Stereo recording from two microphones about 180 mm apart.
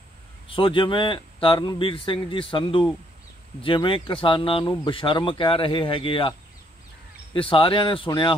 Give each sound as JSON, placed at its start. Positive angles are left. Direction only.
{"t": 0.5, "sound": "speech", "side_deg": 30}
{"t": 7.3, "sound": "speech", "side_deg": 30}